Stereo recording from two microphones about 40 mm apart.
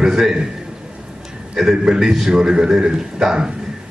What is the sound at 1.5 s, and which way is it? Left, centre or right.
A man's voice, centre.